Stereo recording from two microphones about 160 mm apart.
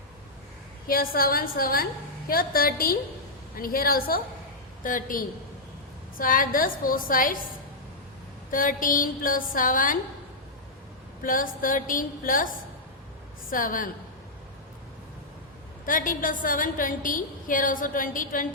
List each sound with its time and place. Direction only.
0.9 s a woman's voice: 65° left (ahead or behind)
8.4 s a woman's voice: 60° left (ahead or behind)
11.2 s a woman's voice: 60° left (ahead or behind)
15.9 s a woman's voice: 55° left (ahead or behind)